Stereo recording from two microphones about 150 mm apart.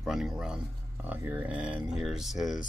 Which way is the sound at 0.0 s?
Centre (ahead or behind).